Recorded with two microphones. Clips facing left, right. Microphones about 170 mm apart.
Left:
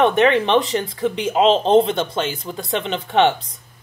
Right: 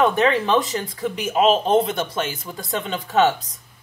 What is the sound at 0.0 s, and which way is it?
Speech, 25° left (ahead or behind).